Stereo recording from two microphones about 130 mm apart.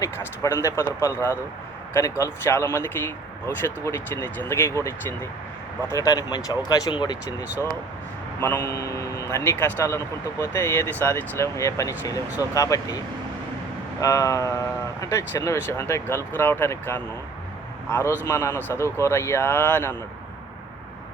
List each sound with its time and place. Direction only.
0.0 s speech: 25° left (ahead or behind)
8.4 s speech: 20° left (ahead or behind)
14.0 s speech: 25° left (ahead or behind)